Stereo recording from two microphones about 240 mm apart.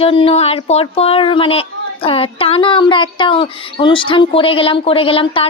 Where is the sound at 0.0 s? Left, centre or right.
Left.